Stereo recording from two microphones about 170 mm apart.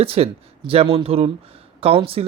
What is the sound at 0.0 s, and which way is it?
Speech, 35° right (ahead or behind).